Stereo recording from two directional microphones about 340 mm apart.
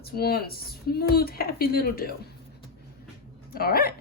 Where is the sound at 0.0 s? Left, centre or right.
Left.